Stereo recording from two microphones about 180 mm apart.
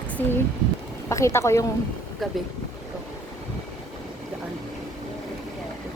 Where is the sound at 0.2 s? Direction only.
10° left (ahead or behind).